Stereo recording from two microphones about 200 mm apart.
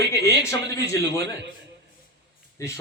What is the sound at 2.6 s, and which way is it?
Speech, 15° left (ahead or behind).